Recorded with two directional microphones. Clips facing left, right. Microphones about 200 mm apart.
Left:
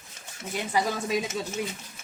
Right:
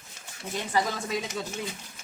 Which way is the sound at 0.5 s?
15° left (ahead or behind).